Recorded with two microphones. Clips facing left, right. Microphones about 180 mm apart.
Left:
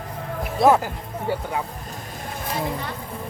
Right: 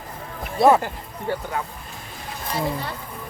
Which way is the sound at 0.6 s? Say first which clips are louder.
Right 1 dB; centre (ahead or behind).